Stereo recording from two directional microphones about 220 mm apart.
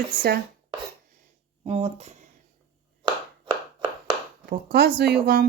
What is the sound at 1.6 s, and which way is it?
Speech, 30° right (ahead or behind).